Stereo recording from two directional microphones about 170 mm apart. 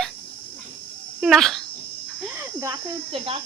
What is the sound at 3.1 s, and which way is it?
Speech, 30° right (ahead or behind).